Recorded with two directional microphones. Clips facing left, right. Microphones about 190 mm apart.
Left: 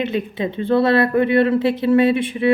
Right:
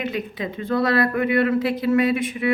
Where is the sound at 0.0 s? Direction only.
25° left (ahead or behind).